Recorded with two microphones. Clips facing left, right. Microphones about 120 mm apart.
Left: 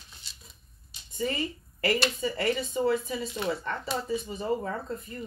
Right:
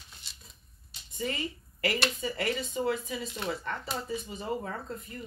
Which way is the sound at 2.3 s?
35° left (ahead or behind).